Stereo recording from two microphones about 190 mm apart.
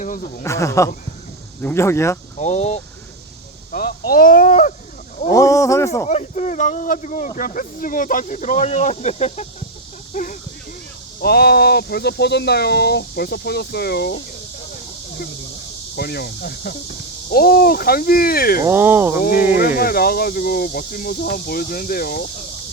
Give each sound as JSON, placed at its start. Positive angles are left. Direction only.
{"t": 0.0, "sound": "speech", "side_deg": 45}
{"t": 0.4, "sound": "speech", "side_deg": 15}
{"t": 2.4, "sound": "speech", "side_deg": 35}
{"t": 3.7, "sound": "speech", "side_deg": 50}
{"t": 5.3, "sound": "speech", "side_deg": 15}
{"t": 6.1, "sound": "speech", "side_deg": 40}
{"t": 10.1, "sound": "a sound", "side_deg": 45}
{"t": 11.2, "sound": "speech", "side_deg": 55}
{"t": 16.0, "sound": "speech", "side_deg": 55}
{"t": 18.6, "sound": "speech", "side_deg": -10}
{"t": 19.5, "sound": "speech", "side_deg": 50}